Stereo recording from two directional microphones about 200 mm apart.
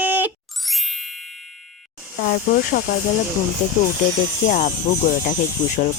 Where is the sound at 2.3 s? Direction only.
45° left (ahead or behind).